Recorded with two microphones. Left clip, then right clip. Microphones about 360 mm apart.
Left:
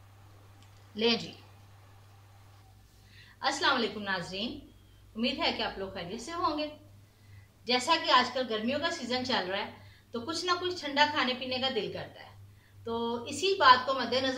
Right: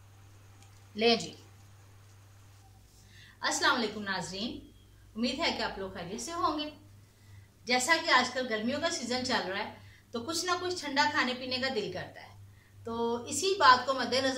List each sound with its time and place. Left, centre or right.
0.9 s a woman's voice: centre
3.3 s a woman's voice: centre
7.6 s a woman's voice: centre